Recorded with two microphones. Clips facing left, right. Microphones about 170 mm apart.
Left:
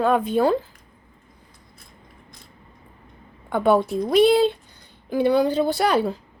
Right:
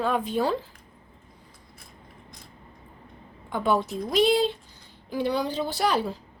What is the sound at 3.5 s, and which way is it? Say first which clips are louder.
A woman's voice: left 6 dB; 60° left (ahead or behind).